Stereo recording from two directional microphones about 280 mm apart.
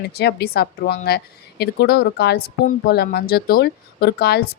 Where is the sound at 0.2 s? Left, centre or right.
Left.